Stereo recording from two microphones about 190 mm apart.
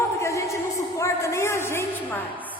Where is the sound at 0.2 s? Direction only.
15° left (ahead or behind).